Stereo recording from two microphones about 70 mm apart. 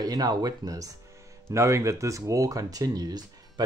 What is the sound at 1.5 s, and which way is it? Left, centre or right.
Speech, right.